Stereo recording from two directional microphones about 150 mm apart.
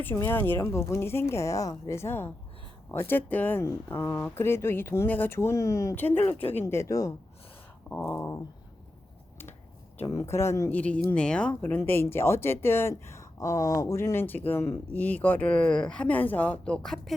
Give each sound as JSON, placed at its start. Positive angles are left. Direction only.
{"t": 0.0, "sound": "speech", "side_deg": 15}
{"t": 10.0, "sound": "speech", "side_deg": 20}